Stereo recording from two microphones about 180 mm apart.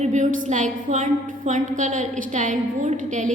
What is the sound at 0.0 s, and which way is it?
A woman's voice, 45° right (ahead or behind).